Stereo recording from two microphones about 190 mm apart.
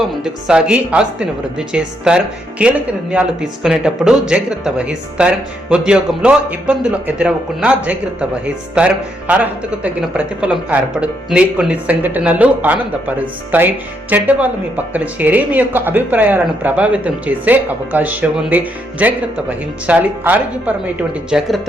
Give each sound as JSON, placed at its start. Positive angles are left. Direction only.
{"t": 0.2, "sound": "speech", "side_deg": -5}